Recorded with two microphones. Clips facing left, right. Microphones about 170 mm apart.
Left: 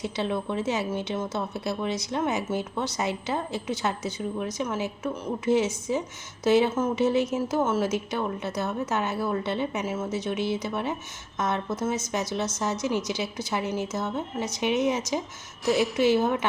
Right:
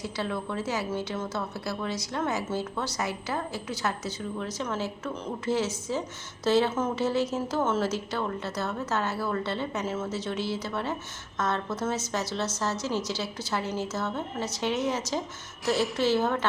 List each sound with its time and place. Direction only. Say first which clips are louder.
0.0 s a woman's voice: left 3 dB; 20° left (ahead or behind)